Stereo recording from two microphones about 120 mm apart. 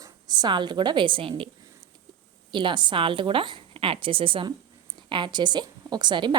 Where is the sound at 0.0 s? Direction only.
35° right (ahead or behind).